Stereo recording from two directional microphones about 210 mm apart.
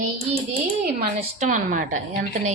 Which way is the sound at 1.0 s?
35° right (ahead or behind).